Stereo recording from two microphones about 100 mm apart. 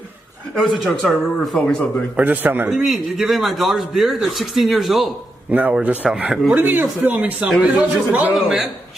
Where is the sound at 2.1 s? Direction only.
20° right (ahead or behind).